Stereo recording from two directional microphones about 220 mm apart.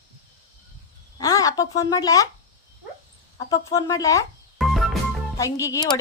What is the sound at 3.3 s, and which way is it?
Speech, 15° left (ahead or behind).